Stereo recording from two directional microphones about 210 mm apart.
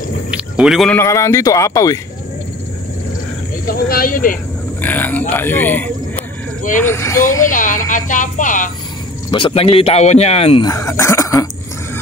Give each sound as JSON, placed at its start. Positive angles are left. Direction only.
{"t": 0.3, "sound": "speech", "side_deg": -5}
{"t": 0.9, "sound": "speech", "side_deg": 15}
{"t": 3.6, "sound": "speech", "side_deg": 45}
{"t": 4.8, "sound": "speech", "side_deg": 10}
{"t": 7.4, "sound": "speech", "side_deg": 40}
{"t": 9.3, "sound": "speech", "side_deg": 25}
{"t": 10.7, "sound": "speech", "side_deg": 15}